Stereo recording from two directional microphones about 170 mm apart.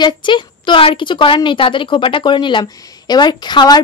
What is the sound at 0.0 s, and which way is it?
A woman's voice, 30° left (ahead or behind).